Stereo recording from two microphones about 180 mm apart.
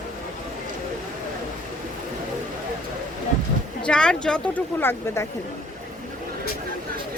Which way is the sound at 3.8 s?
5° left (ahead or behind).